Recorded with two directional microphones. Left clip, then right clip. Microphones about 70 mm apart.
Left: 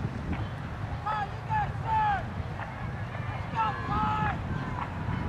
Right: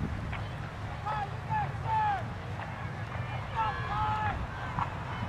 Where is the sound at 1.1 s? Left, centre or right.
Left.